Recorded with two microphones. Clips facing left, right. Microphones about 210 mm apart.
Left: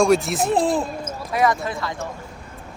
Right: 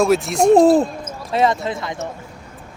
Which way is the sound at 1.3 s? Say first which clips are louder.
Right 3 dB; 25° right (ahead or behind).